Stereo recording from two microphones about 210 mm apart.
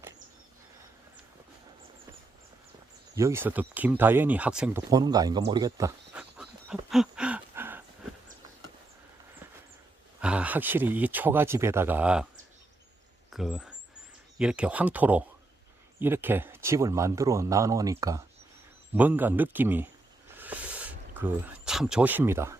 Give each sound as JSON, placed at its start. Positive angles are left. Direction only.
{"t": 3.2, "sound": "speech", "side_deg": -10}
{"t": 4.9, "sound": "speech", "side_deg": -20}
{"t": 6.1, "sound": "a sound", "side_deg": -5}
{"t": 10.2, "sound": "speech", "side_deg": -5}
{"t": 13.3, "sound": "speech", "side_deg": 0}
{"t": 20.3, "sound": "a sound", "side_deg": -10}